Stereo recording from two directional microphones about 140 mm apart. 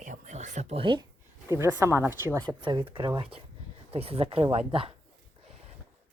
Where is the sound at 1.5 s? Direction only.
20° right (ahead or behind).